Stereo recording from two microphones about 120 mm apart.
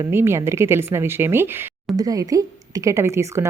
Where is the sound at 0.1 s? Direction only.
20° right (ahead or behind).